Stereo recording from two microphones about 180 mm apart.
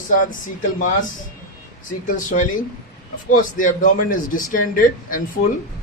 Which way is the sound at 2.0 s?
45° left (ahead or behind).